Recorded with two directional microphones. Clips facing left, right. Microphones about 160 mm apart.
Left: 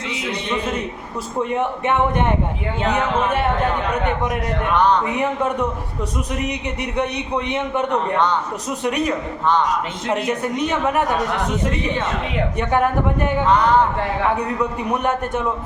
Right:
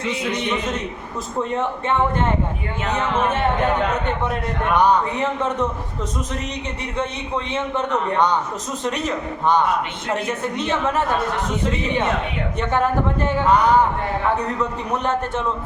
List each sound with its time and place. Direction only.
1.5 s a man's voice: 15° left (ahead or behind)
4.7 s speech: 10° right (ahead or behind)
5.1 s a man's voice: 15° left (ahead or behind)
6.9 s a man's voice: 15° left (ahead or behind)
10.4 s a man's voice: 10° left (ahead or behind)
12.5 s a man's voice: 15° left (ahead or behind)
14.6 s a man's voice: 15° left (ahead or behind)